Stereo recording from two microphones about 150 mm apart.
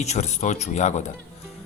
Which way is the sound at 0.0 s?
50° left (ahead or behind).